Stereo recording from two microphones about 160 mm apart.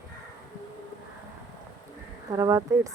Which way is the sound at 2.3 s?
20° right (ahead or behind).